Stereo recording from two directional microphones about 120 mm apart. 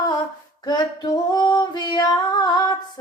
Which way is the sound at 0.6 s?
35° left (ahead or behind).